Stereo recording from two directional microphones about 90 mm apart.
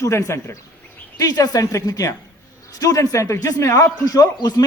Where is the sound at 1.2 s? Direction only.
45° left (ahead or behind).